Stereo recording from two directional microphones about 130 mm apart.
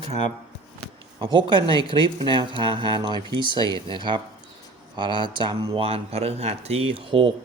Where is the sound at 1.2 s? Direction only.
35° right (ahead or behind).